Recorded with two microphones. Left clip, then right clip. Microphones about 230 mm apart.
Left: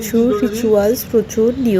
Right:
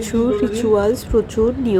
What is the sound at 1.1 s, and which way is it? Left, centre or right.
Speech, centre.